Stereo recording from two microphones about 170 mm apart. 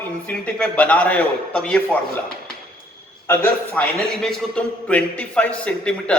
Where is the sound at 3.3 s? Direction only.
10° left (ahead or behind).